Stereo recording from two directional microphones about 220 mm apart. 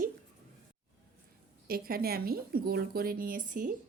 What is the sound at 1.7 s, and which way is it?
A woman's voice, 45° right (ahead or behind).